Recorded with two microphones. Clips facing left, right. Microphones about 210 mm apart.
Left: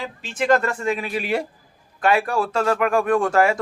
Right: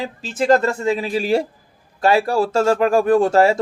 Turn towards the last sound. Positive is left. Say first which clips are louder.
# right 4 dB
turn(degrees=-25)  # may be behind; listen again after turning